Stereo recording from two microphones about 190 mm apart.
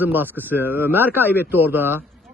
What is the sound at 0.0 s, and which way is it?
A man's voice, 10° right (ahead or behind).